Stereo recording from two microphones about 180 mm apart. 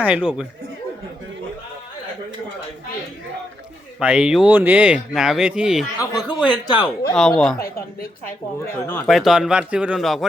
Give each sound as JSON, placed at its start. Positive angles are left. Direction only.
{"t": 0.0, "sound": "speech", "side_deg": -5}
{"t": 4.0, "sound": "speech", "side_deg": -5}
{"t": 6.0, "sound": "speech", "side_deg": 20}
{"t": 7.2, "sound": "speech", "side_deg": 5}
{"t": 8.7, "sound": "speech", "side_deg": 10}
{"t": 9.0, "sound": "speech", "side_deg": 0}